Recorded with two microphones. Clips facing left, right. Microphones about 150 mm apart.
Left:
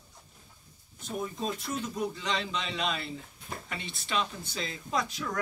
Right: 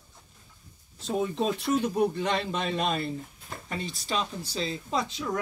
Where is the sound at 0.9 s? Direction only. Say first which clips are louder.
Right 7 dB; 80° right.